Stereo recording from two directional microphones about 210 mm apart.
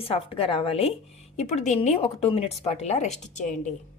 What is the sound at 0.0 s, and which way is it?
A woman's voice, 25° left (ahead or behind).